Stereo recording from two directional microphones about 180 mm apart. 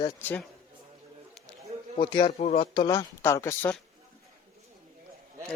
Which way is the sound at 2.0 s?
25° left (ahead or behind).